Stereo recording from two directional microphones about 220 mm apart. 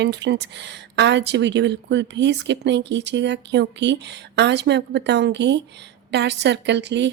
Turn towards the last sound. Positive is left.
turn(degrees=-50)  # may be behind; listen again after turning